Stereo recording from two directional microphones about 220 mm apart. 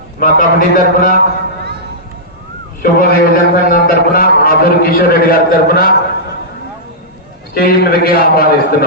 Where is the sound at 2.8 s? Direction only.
40° left (ahead or behind).